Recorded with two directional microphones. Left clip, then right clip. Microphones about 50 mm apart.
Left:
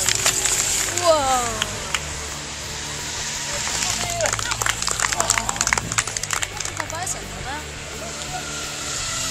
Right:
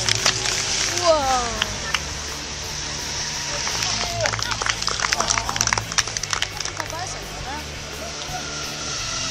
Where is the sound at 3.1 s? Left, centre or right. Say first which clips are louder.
Even; centre.